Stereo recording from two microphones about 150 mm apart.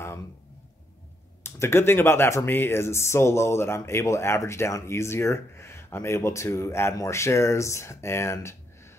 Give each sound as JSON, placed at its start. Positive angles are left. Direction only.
{"t": 1.4, "sound": "speech", "side_deg": 15}